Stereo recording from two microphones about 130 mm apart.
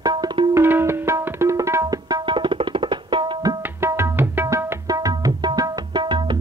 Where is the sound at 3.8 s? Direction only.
15° right (ahead or behind); by 6.4 s 35° right (ahead or behind).